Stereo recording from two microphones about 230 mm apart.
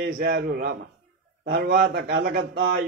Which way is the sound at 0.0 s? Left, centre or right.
Right.